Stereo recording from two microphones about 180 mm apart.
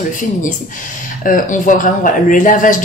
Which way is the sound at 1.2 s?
45° left (ahead or behind).